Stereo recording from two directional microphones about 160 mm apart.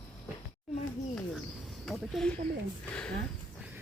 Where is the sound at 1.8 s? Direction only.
Centre (ahead or behind).